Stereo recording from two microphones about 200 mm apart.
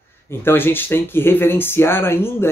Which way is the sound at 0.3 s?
10° left (ahead or behind).